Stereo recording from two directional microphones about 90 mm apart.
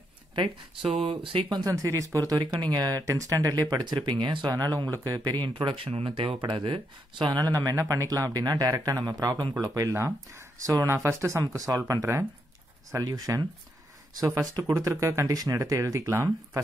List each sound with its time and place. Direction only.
1.0 s speech: 80° right
1.7 s speech: 35° right (ahead or behind)
3.7 s speech: 50° right (ahead or behind)
4.5 s speech: 50° right (ahead or behind)
5.3 s speech: 60° right (ahead or behind)
9.9 s speech: 30° right (ahead or behind)
13.0 s speech: 45° right (ahead or behind)
14.5 s speech: 35° right (ahead or behind)